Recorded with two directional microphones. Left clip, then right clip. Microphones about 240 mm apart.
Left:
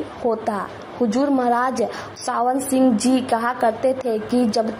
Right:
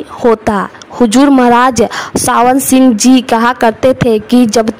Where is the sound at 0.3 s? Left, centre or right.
Right.